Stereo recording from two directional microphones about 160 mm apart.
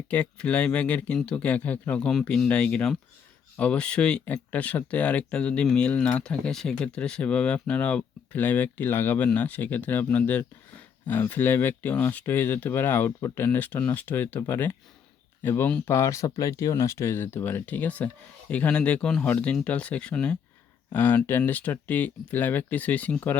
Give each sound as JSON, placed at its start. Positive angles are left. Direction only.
{"t": 0.1, "sound": "speech", "side_deg": 10}